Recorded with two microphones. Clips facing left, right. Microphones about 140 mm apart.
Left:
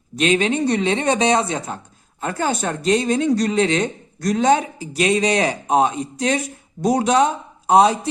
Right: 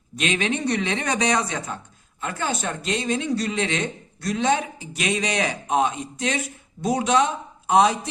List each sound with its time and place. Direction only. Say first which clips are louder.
0.2 s speech: left 6 dB; 35° left (ahead or behind)
2.2 s speech: left 5 dB; 40° left (ahead or behind)